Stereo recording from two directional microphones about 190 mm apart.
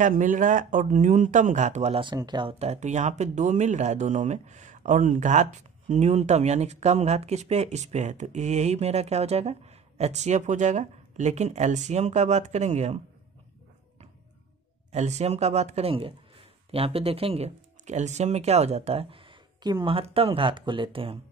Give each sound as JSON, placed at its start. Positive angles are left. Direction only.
{"t": 0.0, "sound": "speech", "side_deg": -45}
{"t": 14.9, "sound": "speech", "side_deg": -35}